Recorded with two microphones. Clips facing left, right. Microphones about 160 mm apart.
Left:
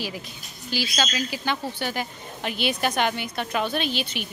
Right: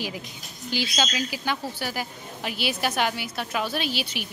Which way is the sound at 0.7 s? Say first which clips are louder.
Even; 15° right (ahead or behind).